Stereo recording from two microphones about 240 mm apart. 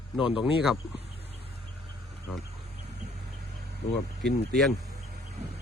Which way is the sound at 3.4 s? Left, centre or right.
Right.